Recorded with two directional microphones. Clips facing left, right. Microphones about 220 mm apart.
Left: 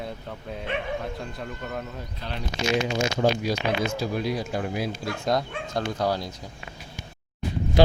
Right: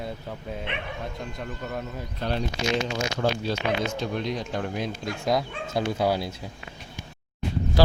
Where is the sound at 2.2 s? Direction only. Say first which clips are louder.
Right 9 dB; 40° right (ahead or behind).